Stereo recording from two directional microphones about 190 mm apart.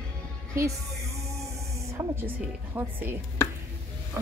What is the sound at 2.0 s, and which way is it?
Speech, 20° right (ahead or behind).